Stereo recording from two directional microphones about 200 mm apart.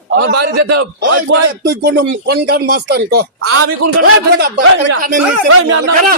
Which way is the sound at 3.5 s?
90° right.